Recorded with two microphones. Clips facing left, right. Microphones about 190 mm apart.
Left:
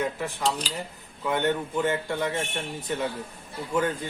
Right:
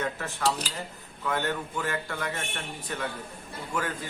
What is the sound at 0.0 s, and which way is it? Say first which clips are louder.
A man's voice: left 2 dB; 15° left (ahead or behind).